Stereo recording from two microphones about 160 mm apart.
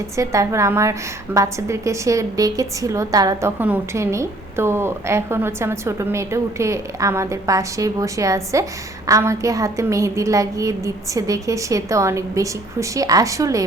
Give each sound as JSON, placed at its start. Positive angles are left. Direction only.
{"t": 0.2, "sound": "a woman's voice", "side_deg": -20}